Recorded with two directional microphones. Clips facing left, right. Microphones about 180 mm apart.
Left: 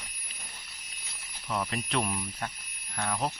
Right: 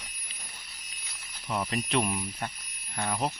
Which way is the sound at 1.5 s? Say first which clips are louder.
Right 2 dB; 5° right (ahead or behind).